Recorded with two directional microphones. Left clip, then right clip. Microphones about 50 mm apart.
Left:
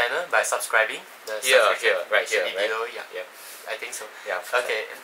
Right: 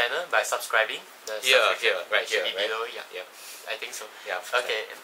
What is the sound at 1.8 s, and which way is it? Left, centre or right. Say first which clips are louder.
Speech: left 3 dB; centre.